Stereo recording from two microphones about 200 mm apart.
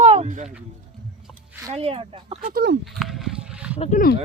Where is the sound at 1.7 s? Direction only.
30° right (ahead or behind).